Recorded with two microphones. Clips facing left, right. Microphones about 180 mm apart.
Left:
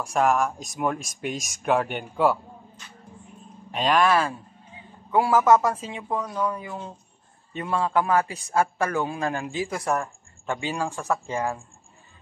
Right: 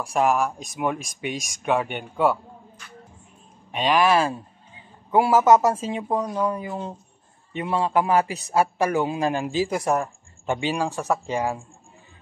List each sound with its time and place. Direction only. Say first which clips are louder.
0.0 s speech: right 1 dB; centre (ahead or behind)
3.7 s speech: right 1 dB; centre (ahead or behind)
4.0 s a man's voice: right 2 dB; 25° right (ahead or behind)
5.8 s speech: right 5 dB; 40° right (ahead or behind)
7.5 s a man's voice: right 2 dB; 20° right (ahead or behind)